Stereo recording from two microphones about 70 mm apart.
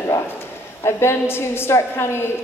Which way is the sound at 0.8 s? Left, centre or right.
Left.